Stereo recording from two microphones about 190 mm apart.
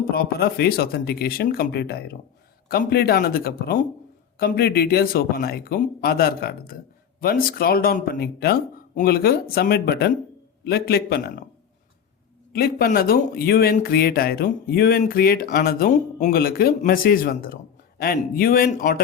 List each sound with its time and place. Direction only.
0.1 s speech: 55° left (ahead or behind)
12.5 s speech: 50° left (ahead or behind)